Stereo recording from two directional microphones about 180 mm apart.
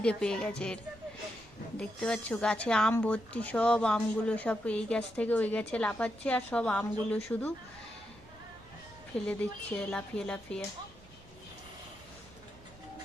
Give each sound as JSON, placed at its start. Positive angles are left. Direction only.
{"t": 0.0, "sound": "a woman's voice", "side_deg": 5}
{"t": 1.8, "sound": "a woman's voice", "side_deg": 5}
{"t": 9.2, "sound": "a woman's voice", "side_deg": 5}